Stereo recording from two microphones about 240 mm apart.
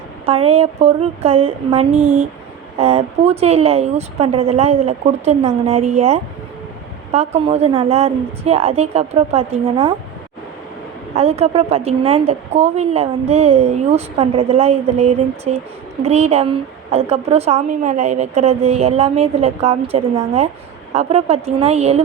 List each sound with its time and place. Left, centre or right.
0.3 s a woman's voice: right
11.1 s a woman's voice: right